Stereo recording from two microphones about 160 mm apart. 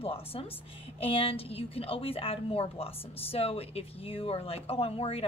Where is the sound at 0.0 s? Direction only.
35° left (ahead or behind).